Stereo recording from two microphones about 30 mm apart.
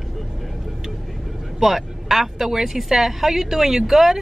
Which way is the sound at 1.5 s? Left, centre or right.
Centre.